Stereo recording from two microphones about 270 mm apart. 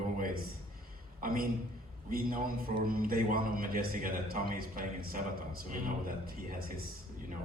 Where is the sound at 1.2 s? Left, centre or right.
Right.